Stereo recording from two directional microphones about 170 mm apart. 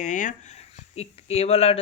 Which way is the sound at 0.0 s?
50° left (ahead or behind).